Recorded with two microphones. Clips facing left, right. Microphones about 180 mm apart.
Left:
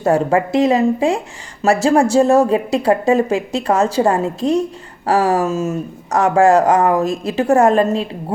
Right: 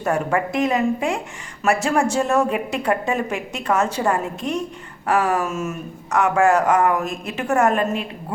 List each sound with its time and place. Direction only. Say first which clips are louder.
0.0 s a woman's voice: left 6 dB; 30° left (ahead or behind)